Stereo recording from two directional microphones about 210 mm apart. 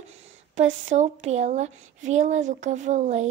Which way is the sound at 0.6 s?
35° right (ahead or behind).